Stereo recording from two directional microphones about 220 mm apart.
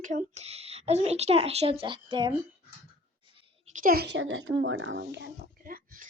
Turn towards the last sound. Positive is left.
turn(degrees=-40)  # may be behind; listen again after turning